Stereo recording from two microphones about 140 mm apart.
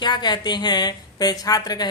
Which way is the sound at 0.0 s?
30° left (ahead or behind).